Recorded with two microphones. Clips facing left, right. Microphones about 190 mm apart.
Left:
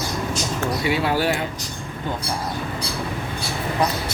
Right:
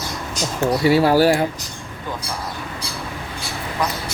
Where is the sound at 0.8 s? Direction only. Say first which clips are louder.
Right 8 dB; 35° right (ahead or behind).